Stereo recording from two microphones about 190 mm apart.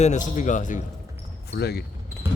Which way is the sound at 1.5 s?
60° left (ahead or behind).